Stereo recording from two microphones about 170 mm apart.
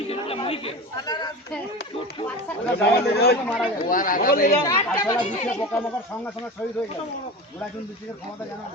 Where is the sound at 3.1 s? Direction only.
70° left (ahead or behind).